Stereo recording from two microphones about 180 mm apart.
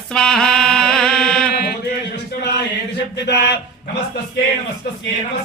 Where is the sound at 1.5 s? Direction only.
60° left (ahead or behind).